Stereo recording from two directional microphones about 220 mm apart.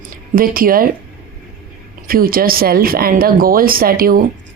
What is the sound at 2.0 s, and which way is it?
Speech, 40° right (ahead or behind).